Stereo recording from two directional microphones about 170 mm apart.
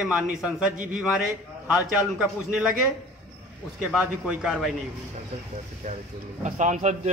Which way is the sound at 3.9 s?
5° right (ahead or behind).